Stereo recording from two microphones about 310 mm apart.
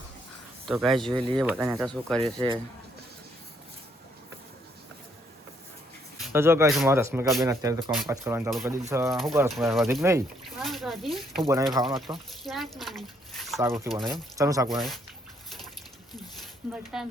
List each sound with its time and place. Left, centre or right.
0.7 s speech: centre
1.1 s speech: centre
1.4 s speech: centre
2.2 s speech: centre
6.2 s speech: centre
14.7 s speech: centre
16.7 s speech: centre